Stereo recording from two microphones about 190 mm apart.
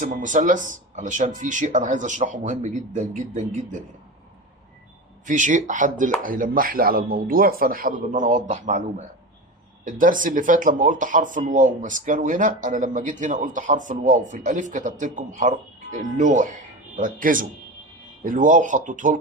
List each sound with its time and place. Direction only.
0.0 s speech: 40° right (ahead or behind)
5.2 s speech: 40° right (ahead or behind)
9.8 s speech: 45° right (ahead or behind)